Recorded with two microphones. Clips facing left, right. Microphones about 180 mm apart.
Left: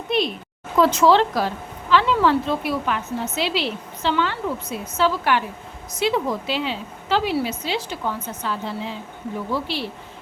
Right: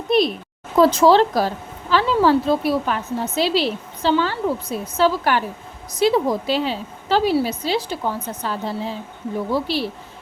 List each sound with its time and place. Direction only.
0.8 s speech: 35° right (ahead or behind)